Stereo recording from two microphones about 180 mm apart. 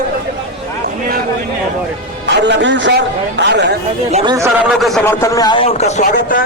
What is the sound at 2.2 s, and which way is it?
A man's voice, 75° right (ahead or behind).